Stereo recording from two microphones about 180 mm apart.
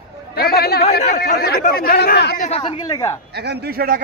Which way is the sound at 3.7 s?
55° right (ahead or behind).